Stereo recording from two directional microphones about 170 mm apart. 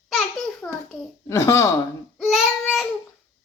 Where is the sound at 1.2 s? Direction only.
15° left (ahead or behind).